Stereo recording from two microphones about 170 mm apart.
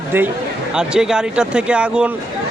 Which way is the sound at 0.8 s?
5° right (ahead or behind).